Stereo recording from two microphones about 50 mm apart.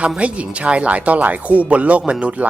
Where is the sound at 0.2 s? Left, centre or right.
Right.